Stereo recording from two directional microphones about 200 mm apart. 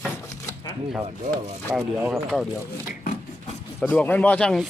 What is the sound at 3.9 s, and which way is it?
Speech, 5° left (ahead or behind).